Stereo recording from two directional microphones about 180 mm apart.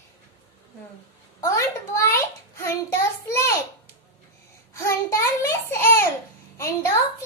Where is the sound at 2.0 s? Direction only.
15° left (ahead or behind).